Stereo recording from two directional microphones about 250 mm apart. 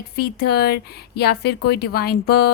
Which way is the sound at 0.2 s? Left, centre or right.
Left.